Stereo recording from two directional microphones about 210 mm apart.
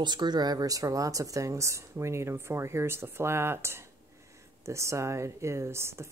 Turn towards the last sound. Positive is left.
turn(degrees=-10)  # may be behind; listen again after turning